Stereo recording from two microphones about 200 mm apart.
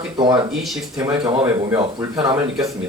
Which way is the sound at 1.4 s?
15° right (ahead or behind).